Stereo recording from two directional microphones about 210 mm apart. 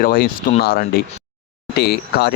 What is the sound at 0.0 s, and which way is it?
Speech, 45° left (ahead or behind).